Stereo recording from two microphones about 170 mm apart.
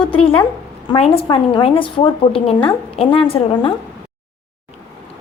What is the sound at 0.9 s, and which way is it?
A woman's voice, 35° left (ahead or behind).